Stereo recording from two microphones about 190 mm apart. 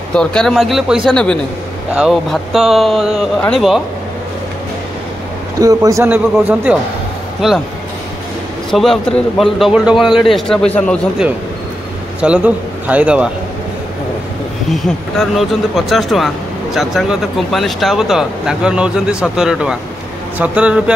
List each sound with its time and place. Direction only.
0.1 s speech: 5° left (ahead or behind)
5.6 s a man's voice: 20° right (ahead or behind)
6.3 s speech: 5° right (ahead or behind)
8.7 s speech: centre (ahead or behind)
12.2 s a man's voice: 5° right (ahead or behind)
14.7 s a man's voice: centre (ahead or behind)